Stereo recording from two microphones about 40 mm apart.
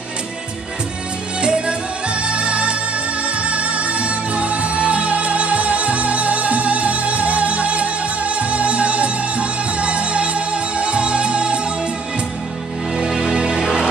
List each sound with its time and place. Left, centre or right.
1.4 s music: right
12.9 s music: centre